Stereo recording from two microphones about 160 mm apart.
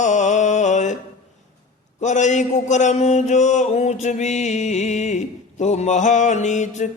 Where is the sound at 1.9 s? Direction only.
50° left (ahead or behind).